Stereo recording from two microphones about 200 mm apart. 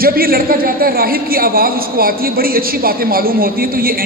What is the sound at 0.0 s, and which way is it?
A man's voice, 45° right (ahead or behind).